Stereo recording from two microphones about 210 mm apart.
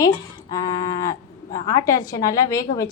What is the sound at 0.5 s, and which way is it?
Livestock, 20° left (ahead or behind).